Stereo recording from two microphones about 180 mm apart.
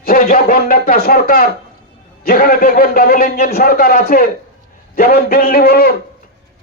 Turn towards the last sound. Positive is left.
turn(degrees=60)  # may be behind; listen again after turning